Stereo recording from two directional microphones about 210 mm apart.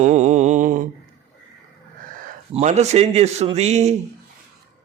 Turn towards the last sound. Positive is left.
turn(degrees=-30)  # may be behind; listen again after turning